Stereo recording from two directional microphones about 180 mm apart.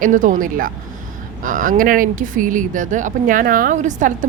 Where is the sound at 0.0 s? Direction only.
45° right (ahead or behind).